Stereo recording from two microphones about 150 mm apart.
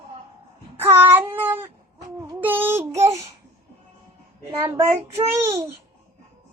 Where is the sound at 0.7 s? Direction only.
15° right (ahead or behind).